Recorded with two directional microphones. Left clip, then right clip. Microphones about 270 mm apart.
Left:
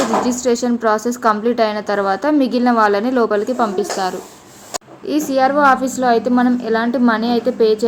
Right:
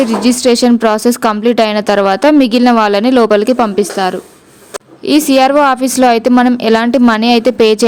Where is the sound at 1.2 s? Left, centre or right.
Right.